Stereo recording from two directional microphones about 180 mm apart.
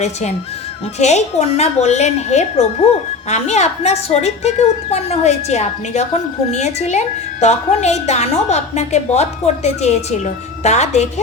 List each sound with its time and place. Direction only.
0.0 s a woman's voice: 40° left (ahead or behind)